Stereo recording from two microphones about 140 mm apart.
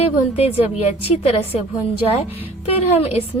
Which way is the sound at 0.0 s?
45° left (ahead or behind).